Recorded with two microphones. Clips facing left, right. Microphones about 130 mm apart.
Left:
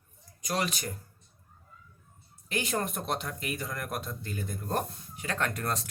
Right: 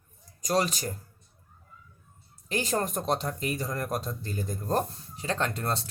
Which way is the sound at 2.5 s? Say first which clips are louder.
Right 3 dB; 35° right (ahead or behind).